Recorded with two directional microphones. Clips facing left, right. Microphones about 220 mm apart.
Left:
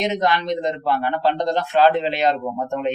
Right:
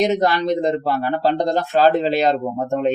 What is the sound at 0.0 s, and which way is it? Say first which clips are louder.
Speech: right 4 dB; 40° right (ahead or behind).